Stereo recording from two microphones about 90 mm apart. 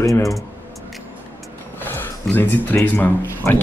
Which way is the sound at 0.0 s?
40° left (ahead or behind).